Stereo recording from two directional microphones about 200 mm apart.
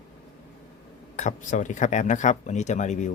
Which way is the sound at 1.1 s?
35° left (ahead or behind).